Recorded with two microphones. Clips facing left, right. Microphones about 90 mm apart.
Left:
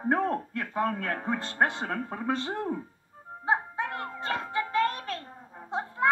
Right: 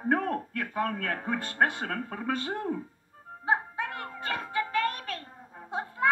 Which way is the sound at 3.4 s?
Centre (ahead or behind).